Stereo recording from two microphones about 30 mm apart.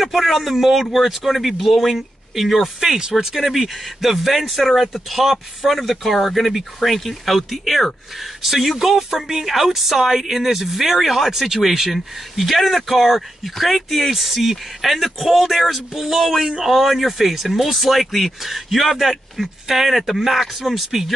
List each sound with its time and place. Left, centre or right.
0.0 s a man's voice: centre
0.9 s speech: centre
3.0 s speech: centre
3.3 s speech: centre
8.8 s speech: centre
11.9 s speech: centre